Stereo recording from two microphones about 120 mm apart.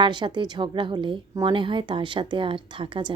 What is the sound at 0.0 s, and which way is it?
A woman's voice, 40° right (ahead or behind).